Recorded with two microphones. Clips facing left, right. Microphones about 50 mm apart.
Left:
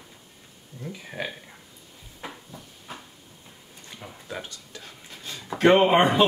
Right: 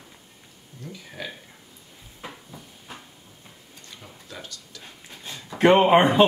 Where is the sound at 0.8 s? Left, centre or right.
Centre.